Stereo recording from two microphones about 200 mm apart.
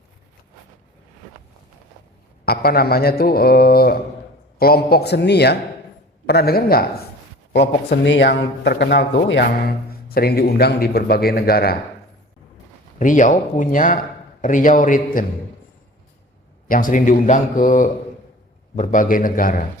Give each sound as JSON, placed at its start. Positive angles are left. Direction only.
{"t": 2.4, "sound": "speech", "side_deg": 50}
{"t": 13.0, "sound": "a man's voice", "side_deg": 40}
{"t": 16.6, "sound": "a man's voice", "side_deg": 40}